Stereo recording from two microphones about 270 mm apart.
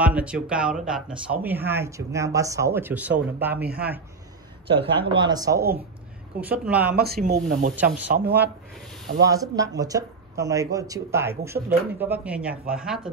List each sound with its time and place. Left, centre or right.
0.0 s speech: centre
3.6 s speech: right
4.6 s speech: centre
7.0 s speech: right
9.2 s speech: centre